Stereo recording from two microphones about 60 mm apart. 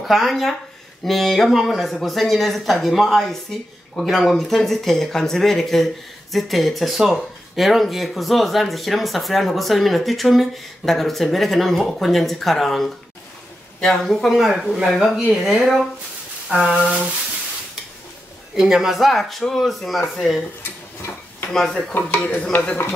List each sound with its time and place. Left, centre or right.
0.0 s speech: centre
14.5 s a sound: centre
15.0 s speech: centre
16.4 s a sound: centre
18.5 s speech: centre
21.5 s speech: centre
21.9 s speech: left